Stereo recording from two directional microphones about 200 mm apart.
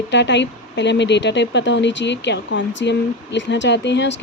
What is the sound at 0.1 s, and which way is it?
Speech, 60° left (ahead or behind).